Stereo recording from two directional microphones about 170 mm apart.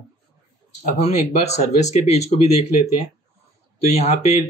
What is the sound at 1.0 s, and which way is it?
Speech, 40° left (ahead or behind).